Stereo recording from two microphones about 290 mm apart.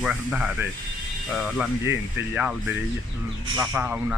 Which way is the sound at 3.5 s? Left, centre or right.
Centre.